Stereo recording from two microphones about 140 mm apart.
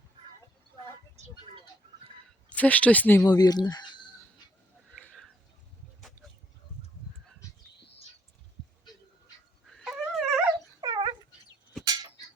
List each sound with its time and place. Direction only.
2.5 s speech: 10° left (ahead or behind)
3.2 s speech: 30° left (ahead or behind)
9.6 s dog: centre (ahead or behind)
10.8 s dog: 35° right (ahead or behind)